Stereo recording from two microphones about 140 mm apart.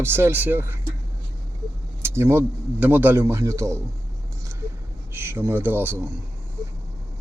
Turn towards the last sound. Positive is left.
turn(degrees=-15)  # may be behind; listen again after turning